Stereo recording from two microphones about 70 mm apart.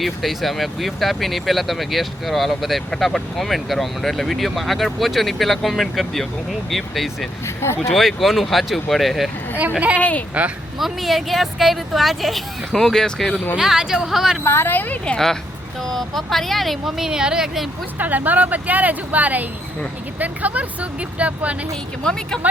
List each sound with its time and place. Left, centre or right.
0.0 s speech: centre
7.4 s speech: left
7.9 s speech: centre
10.0 s speech: left
10.8 s speech: centre
13.6 s speech: centre
14.4 s speech: left
15.0 s speech: centre
18.0 s speech: right